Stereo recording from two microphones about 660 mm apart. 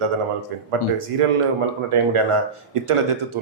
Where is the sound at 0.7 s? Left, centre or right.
Right.